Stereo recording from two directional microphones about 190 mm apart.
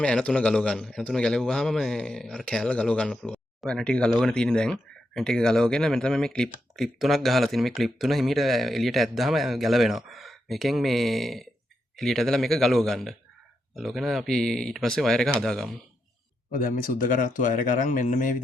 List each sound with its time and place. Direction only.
0.0 s a man's voice: 5° left (ahead or behind)
16.5 s speech: 45° left (ahead or behind)